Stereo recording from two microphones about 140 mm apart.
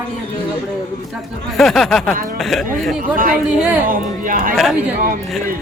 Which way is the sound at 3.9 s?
80° right.